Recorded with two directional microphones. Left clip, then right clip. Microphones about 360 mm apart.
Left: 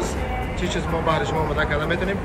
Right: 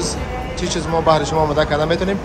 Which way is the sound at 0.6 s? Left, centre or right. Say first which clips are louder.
Right 7 dB; centre.